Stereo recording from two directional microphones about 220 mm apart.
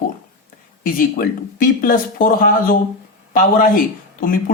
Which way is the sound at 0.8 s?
40° left (ahead or behind).